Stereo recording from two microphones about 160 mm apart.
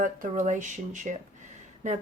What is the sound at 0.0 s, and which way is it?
Speech, 50° right (ahead or behind).